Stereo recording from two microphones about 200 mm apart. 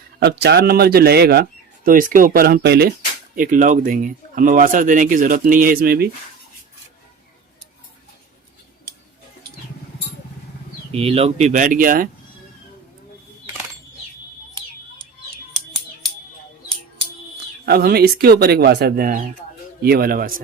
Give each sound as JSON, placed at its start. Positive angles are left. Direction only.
{"t": 0.2, "sound": "speech", "side_deg": -55}
{"t": 10.9, "sound": "speech", "side_deg": -30}
{"t": 17.7, "sound": "speech", "side_deg": -50}